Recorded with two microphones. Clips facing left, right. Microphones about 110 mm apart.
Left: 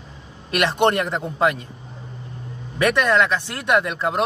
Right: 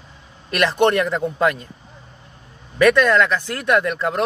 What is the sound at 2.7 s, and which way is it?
A man's voice, 25° left (ahead or behind).